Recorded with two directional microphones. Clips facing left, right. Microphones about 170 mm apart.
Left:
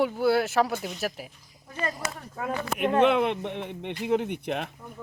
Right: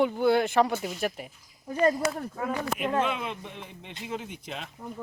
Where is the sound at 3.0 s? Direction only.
65° left (ahead or behind).